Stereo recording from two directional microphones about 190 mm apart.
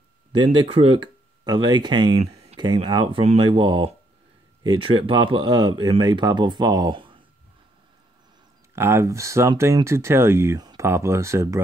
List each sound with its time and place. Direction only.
0.4 s speech: 30° right (ahead or behind)
8.7 s speech: 15° right (ahead or behind)